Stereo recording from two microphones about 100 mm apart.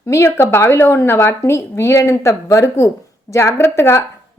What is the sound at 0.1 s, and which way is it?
A woman's voice, 25° left (ahead or behind).